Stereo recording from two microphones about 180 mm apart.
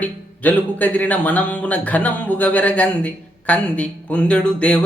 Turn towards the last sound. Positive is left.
turn(degrees=5)  # may be behind; listen again after turning